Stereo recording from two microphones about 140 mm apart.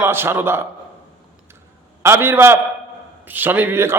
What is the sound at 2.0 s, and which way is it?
A man's voice, 15° right (ahead or behind).